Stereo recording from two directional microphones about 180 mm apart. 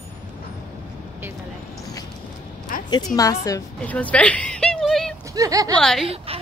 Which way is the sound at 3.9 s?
5° left (ahead or behind).